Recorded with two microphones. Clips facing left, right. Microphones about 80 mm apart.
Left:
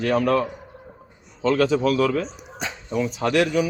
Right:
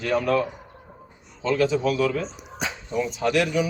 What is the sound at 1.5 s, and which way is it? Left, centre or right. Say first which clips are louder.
Speech: left 2 dB; left.